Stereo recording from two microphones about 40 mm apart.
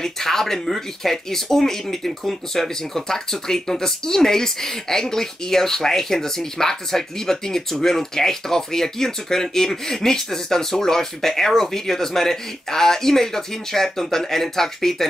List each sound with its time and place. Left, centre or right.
0.0 s speech: centre